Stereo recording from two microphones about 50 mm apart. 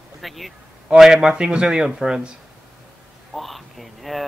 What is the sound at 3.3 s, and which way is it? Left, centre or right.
Speech, centre.